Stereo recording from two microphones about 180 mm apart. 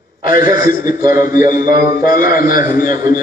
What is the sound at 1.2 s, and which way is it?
A man's voice, 50° left (ahead or behind).